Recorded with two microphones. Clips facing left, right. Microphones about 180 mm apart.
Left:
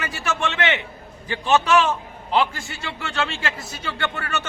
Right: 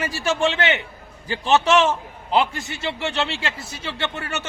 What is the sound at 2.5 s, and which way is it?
A man's voice, 20° right (ahead or behind).